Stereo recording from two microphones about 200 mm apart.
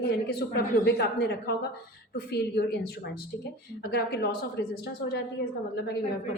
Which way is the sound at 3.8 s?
50° left (ahead or behind).